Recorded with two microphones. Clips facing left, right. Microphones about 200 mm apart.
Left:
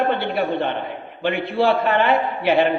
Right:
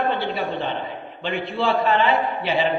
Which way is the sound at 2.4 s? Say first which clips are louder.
Left 5 dB; 55° left (ahead or behind).